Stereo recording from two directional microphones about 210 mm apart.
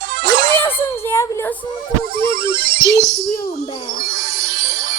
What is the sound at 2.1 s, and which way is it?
Music, 45° right (ahead or behind).